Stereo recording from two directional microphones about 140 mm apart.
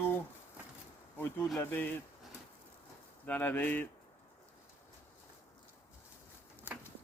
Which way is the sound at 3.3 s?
10° left (ahead or behind).